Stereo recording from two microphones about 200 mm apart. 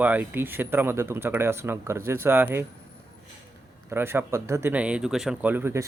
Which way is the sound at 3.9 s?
10° right (ahead or behind).